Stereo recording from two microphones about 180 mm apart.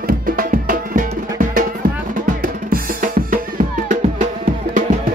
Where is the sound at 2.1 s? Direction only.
45° right (ahead or behind).